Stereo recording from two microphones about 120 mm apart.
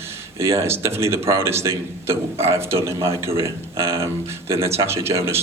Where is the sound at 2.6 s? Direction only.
20° right (ahead or behind).